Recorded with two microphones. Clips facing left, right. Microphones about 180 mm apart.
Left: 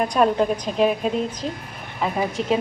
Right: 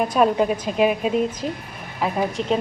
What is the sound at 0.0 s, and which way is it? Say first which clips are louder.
Speech: right 1 dB; 5° right (ahead or behind).